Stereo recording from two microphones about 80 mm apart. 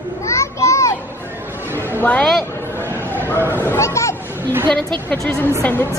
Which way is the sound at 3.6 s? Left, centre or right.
Left.